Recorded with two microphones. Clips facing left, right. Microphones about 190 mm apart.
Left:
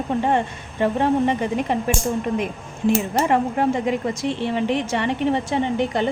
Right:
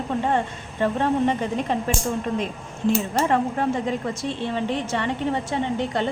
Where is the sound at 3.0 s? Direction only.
10° left (ahead or behind).